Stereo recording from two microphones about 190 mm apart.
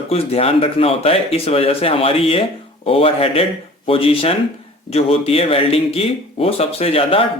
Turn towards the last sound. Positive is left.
turn(degrees=30)  # may be behind; listen again after turning